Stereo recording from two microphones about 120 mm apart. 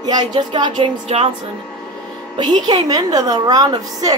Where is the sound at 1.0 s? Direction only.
60° right (ahead or behind).